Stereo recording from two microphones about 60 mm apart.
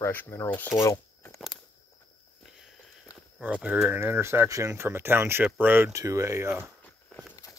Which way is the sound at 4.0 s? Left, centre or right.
Right.